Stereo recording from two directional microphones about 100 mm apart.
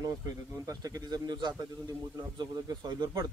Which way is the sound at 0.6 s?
40° right (ahead or behind).